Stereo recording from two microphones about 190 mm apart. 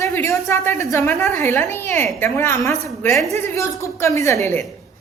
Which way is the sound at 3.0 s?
Centre (ahead or behind).